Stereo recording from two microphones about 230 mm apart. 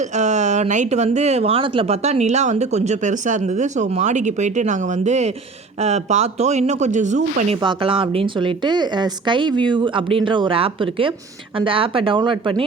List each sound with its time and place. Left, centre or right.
0.0 s speech: right